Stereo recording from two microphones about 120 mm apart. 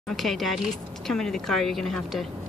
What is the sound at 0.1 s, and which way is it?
A woman's voice, centre (ahead or behind).